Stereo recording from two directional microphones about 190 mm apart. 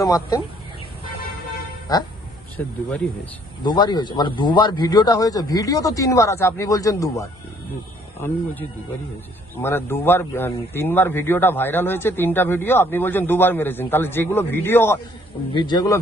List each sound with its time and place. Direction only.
0.1 s a man's voice: 20° left (ahead or behind)
2.6 s speech: 5° left (ahead or behind)
3.6 s a man's voice: 25° left (ahead or behind)
9.6 s speech: 10° left (ahead or behind)
15.5 s a man's voice: 25° left (ahead or behind)